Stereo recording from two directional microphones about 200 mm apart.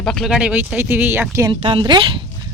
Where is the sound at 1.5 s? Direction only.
25° right (ahead or behind).